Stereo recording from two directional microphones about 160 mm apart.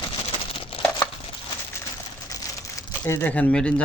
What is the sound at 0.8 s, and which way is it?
Crumpling, 35° left (ahead or behind).